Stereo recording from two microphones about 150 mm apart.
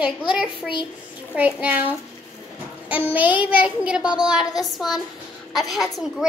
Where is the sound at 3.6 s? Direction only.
5° right (ahead or behind).